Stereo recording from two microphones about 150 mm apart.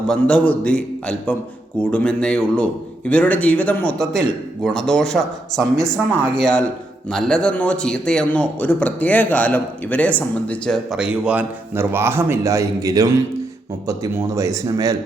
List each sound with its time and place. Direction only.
0.1 s a man's voice: 5° left (ahead or behind)
10.9 s a man's voice: 5° right (ahead or behind); by 14.9 s 25° right (ahead or behind)